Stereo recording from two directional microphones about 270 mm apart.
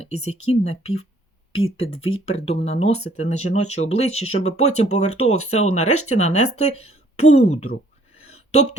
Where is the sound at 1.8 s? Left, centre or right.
Left.